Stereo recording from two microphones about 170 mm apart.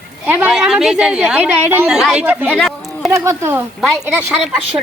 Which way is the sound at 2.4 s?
5° left (ahead or behind).